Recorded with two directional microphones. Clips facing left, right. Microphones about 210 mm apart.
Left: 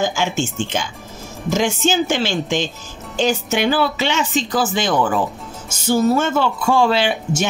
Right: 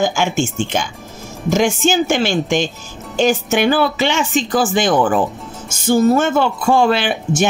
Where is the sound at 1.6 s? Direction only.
50° right (ahead or behind).